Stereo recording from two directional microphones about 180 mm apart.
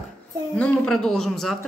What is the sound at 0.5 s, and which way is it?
Speech, 5° left (ahead or behind).